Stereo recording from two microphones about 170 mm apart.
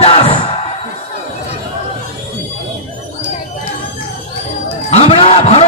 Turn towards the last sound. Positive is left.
turn(degrees=35)  # may be behind; listen again after turning